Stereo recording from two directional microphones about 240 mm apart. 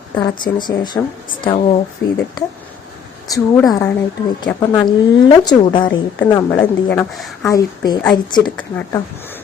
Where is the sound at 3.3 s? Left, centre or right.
Centre.